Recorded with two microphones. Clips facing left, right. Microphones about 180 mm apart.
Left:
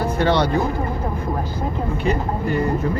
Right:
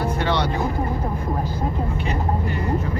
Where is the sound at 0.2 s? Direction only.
40° left (ahead or behind).